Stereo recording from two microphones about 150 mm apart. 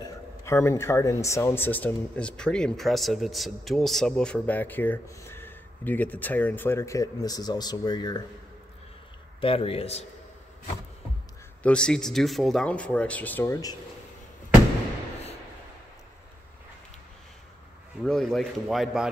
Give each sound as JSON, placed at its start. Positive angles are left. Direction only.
{"t": 0.5, "sound": "speech", "side_deg": 15}
{"t": 9.4, "sound": "speech", "side_deg": 40}
{"t": 11.6, "sound": "speech", "side_deg": 5}
{"t": 18.0, "sound": "speech", "side_deg": 5}